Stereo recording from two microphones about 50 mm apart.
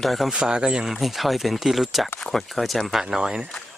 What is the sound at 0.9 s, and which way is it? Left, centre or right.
Speech, centre.